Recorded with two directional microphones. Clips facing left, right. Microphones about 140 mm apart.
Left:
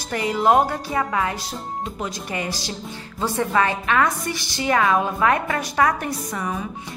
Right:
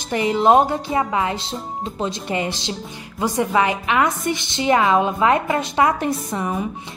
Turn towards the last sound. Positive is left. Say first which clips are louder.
# right 3 dB
turn(degrees=-25)  # may be behind; listen again after turning